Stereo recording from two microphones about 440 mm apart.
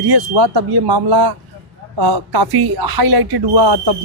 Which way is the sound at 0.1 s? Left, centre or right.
Right.